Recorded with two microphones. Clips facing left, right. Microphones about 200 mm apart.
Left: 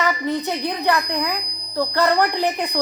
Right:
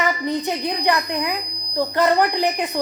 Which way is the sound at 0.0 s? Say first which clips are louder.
Even; 15° right (ahead or behind).